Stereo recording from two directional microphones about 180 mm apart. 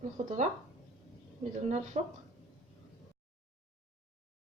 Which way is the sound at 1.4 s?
40° right (ahead or behind).